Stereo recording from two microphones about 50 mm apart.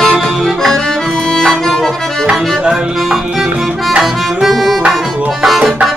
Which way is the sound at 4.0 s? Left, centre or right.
Centre.